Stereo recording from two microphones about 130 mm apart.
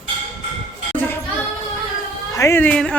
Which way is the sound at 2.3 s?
20° left (ahead or behind).